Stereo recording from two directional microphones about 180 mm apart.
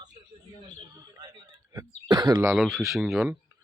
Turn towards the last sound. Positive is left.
turn(degrees=-5)  # may be behind; listen again after turning